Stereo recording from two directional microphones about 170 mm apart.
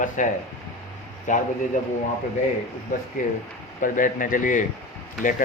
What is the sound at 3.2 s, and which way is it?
Speech, 50° left (ahead or behind).